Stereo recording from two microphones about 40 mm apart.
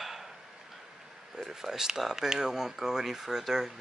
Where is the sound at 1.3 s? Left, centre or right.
Centre.